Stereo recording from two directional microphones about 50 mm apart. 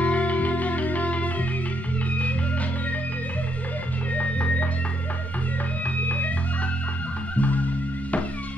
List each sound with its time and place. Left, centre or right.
0.0 s music: left
4.1 s music: left
6.0 s organ: left
7.3 s music: left